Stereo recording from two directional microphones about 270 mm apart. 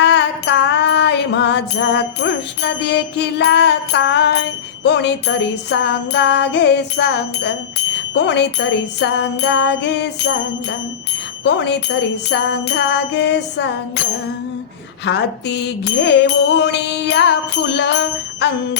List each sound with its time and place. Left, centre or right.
0.0 s music: left
11.4 s music: left
15.0 s music: left